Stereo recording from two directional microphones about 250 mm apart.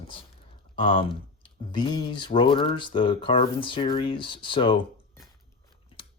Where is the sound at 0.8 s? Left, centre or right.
Left.